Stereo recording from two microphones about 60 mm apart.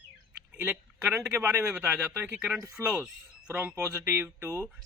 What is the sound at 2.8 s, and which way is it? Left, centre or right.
Speech, right.